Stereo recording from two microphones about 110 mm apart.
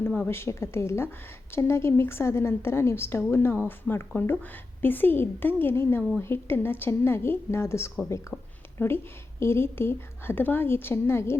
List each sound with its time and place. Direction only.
0.2 s a woman's voice: 20° left (ahead or behind)
6.0 s a woman's voice: 10° left (ahead or behind)
6.2 s a woman's voice: 20° left (ahead or behind)
8.3 s a woman's voice: 10° left (ahead or behind)